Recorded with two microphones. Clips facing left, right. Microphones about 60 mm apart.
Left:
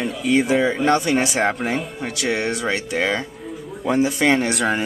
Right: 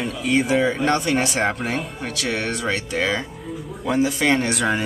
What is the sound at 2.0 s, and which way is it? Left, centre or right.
Speech, centre.